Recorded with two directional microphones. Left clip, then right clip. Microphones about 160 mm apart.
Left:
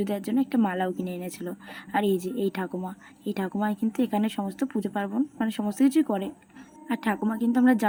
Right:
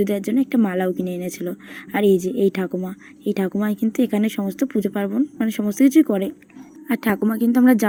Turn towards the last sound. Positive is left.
turn(degrees=-25)  # may be behind; listen again after turning